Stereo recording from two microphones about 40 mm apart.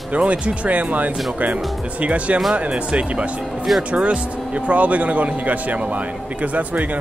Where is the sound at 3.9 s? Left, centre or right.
Right.